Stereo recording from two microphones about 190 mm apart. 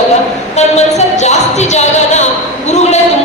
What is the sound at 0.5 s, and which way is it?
A woman's voice, 35° left (ahead or behind).